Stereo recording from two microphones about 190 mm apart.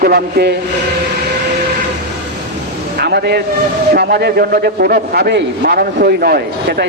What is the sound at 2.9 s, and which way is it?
A man's voice, 55° right (ahead or behind).